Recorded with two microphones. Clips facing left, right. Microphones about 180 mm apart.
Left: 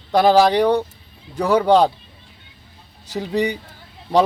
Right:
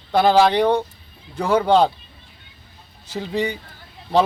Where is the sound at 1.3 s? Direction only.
35° left (ahead or behind).